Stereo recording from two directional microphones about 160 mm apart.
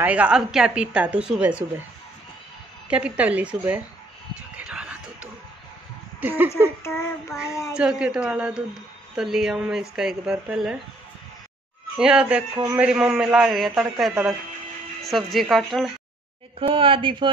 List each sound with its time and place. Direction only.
0.0 s a woman's voice: 10° right (ahead or behind)
2.9 s a woman's voice: 10° right (ahead or behind)
4.6 s a sound: 5° right (ahead or behind)
6.2 s a woman's voice: 10° right (ahead or behind)
6.8 s child singing: 15° left (ahead or behind)
7.7 s speech: 5° right (ahead or behind)
12.0 s a woman's voice: 5° right (ahead or behind)
16.5 s speech: 35° right (ahead or behind)